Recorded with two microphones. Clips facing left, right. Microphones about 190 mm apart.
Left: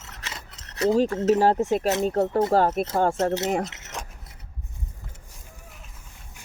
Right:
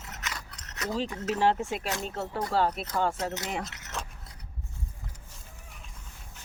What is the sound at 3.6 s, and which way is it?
Keys jangling, 20° left (ahead or behind).